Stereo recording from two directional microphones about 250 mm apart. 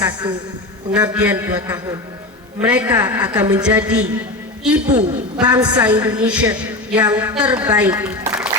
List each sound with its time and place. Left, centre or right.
0.0 s a woman's voice: centre
1.0 s a woman's voice: centre
4.9 s a woman's voice: centre
6.2 s speech: centre
6.5 s a woman's voice: centre